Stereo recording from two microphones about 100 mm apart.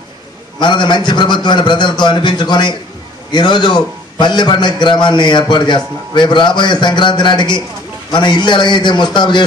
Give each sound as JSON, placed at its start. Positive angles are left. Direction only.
{"t": 0.6, "sound": "a man's voice", "side_deg": 50}